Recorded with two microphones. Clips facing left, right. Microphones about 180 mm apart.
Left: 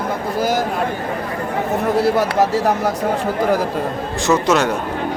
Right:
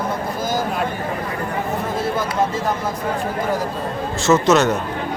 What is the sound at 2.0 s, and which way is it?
Speech, 70° left (ahead or behind).